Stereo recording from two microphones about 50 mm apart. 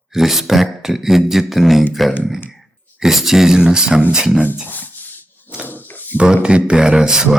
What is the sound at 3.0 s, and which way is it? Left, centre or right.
Speech, centre.